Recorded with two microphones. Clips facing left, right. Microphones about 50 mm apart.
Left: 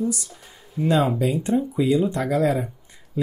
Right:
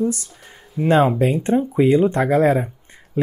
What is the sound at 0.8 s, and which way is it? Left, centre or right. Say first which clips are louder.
Speech: right 5 dB; right.